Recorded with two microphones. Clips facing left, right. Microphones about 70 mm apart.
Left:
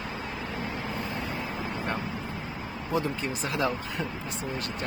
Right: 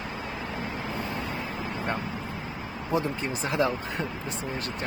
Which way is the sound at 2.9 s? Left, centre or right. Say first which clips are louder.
Right 1 dB; right.